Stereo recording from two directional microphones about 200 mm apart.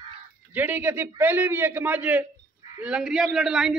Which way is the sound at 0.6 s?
10° right (ahead or behind).